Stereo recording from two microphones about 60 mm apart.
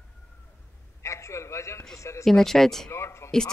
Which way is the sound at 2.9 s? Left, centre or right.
Left.